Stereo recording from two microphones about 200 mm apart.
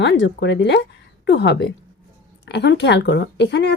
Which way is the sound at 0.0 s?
60° left (ahead or behind).